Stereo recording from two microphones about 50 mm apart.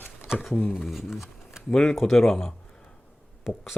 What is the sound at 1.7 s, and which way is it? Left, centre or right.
Speech, centre.